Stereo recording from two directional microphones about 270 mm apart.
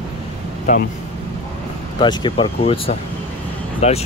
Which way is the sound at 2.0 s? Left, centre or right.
Centre.